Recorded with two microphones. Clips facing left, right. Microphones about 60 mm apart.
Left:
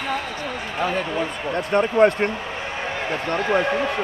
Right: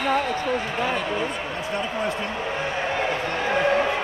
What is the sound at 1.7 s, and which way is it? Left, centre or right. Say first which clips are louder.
Speech: left 11 dB; left.